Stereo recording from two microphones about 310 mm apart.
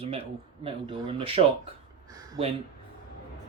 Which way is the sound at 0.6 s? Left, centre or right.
Centre.